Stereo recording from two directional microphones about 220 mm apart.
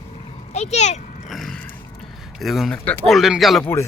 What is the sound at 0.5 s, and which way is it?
Speech, 30° left (ahead or behind).